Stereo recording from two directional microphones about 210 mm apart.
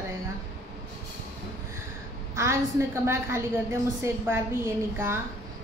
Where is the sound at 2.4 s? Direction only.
15° right (ahead or behind).